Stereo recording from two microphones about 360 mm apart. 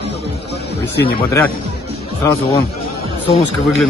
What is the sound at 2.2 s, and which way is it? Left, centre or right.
Speech, centre.